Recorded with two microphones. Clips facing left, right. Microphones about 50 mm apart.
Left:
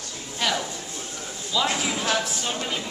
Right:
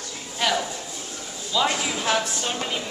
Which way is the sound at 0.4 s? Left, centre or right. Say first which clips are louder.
Right 2 dB; centre.